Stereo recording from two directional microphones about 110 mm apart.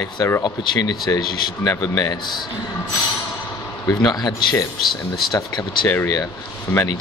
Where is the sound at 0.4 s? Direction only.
35° left (ahead or behind).